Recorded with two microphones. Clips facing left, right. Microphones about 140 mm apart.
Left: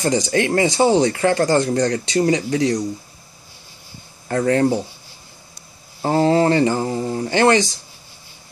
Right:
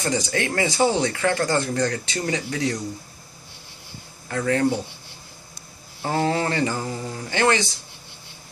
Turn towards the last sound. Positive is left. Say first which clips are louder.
# left 6 dB
turn(degrees=35)  # may be behind; listen again after turning